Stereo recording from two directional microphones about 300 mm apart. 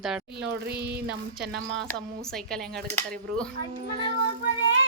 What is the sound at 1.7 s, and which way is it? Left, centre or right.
A woman's voice, centre.